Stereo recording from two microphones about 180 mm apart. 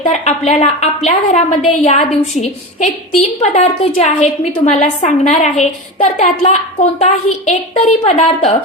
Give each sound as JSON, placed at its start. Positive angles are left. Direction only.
{"t": 0.0, "sound": "a woman's voice", "side_deg": 35}